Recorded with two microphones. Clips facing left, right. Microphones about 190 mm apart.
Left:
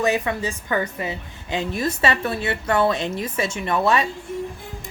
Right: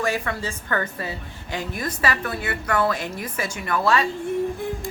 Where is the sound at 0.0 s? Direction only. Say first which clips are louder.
Left 4 dB; 20° left (ahead or behind).